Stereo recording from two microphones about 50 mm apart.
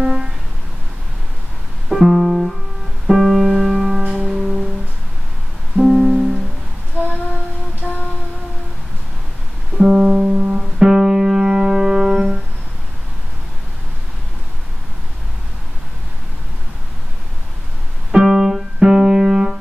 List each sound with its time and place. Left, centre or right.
0.0 s a sound: centre
1.9 s music: centre
4.3 s music: centre
5.8 s music: centre
9.8 s music: centre; by 10.6 s right
10.8 s music: centre
18.1 s piano: centre